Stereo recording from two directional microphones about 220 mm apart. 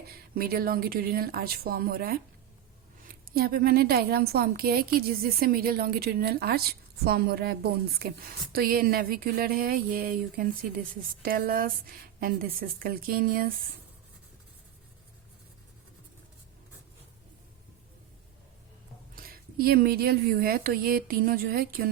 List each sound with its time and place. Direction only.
0.1 s a woman's voice: 45° right (ahead or behind)
19.1 s a woman's voice: 40° right (ahead or behind)